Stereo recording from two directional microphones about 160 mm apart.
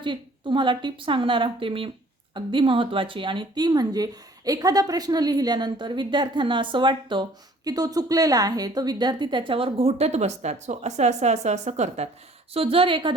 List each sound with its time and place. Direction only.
0.0 s a woman's voice: 30° right (ahead or behind); by 12.0 s 45° right (ahead or behind)
12.5 s a woman's voice: 35° right (ahead or behind)